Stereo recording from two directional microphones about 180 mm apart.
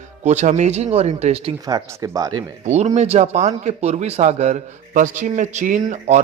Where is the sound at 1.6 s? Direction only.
20° right (ahead or behind).